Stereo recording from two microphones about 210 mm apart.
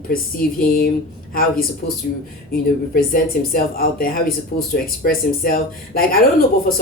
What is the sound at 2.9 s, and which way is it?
Speech, 40° left (ahead or behind).